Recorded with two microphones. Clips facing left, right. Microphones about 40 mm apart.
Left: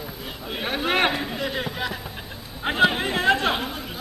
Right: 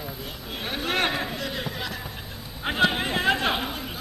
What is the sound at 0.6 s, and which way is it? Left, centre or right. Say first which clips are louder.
A man's voice: left 4 dB; centre.